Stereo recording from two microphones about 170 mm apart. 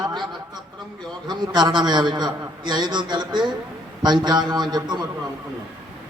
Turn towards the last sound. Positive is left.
turn(degrees=-25)  # may be behind; listen again after turning